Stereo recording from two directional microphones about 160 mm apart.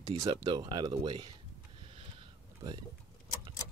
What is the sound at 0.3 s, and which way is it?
Speech, 25° right (ahead or behind).